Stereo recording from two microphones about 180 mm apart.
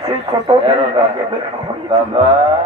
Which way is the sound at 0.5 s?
35° right (ahead or behind).